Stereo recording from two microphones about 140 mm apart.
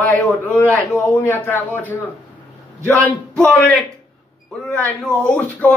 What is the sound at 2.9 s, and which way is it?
Speech, 20° right (ahead or behind).